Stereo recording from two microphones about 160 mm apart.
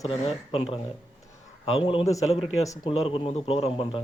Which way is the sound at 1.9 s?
35° left (ahead or behind).